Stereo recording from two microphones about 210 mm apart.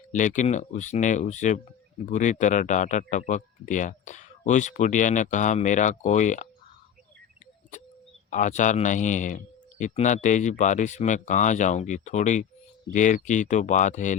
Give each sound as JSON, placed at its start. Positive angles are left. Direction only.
{"t": 0.1, "sound": "speech", "side_deg": 35}
{"t": 7.7, "sound": "music", "side_deg": 35}
{"t": 8.3, "sound": "speech", "side_deg": 35}